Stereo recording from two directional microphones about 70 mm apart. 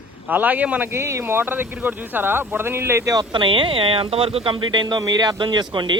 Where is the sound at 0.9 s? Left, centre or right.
Right.